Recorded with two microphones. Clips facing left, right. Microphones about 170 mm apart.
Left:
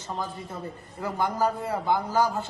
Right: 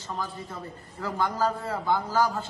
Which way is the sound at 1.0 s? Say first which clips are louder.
Left 1 dB; 15° left (ahead or behind).